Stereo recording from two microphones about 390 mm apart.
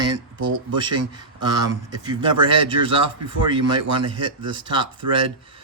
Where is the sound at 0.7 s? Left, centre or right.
Centre.